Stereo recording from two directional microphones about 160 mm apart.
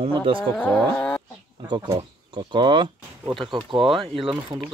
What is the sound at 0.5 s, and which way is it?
Speech, 5° left (ahead or behind).